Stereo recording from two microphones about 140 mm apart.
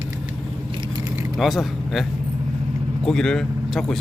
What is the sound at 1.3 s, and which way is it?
Speech, centre (ahead or behind).